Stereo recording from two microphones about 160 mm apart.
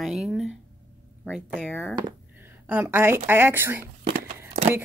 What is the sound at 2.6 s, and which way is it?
Speech, 15° right (ahead or behind).